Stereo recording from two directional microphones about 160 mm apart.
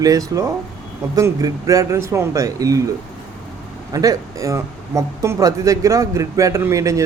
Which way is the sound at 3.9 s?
20° right (ahead or behind).